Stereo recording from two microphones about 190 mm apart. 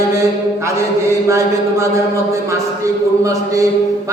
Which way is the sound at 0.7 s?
15° right (ahead or behind).